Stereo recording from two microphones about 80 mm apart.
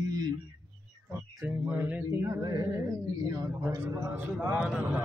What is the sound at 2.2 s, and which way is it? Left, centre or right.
Mantra, right.